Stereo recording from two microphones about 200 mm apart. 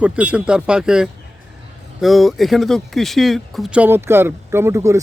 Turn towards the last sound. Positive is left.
turn(degrees=-15)  # may be behind; listen again after turning